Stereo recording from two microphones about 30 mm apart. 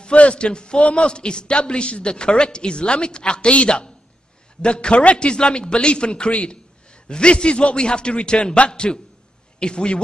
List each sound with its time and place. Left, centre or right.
0.0 s a man's voice: left